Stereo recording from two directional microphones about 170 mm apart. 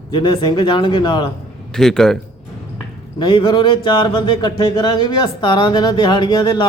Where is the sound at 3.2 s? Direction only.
25° left (ahead or behind).